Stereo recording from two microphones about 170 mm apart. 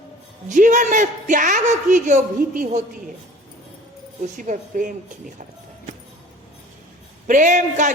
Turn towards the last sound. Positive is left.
turn(degrees=-45)  # may be behind; listen again after turning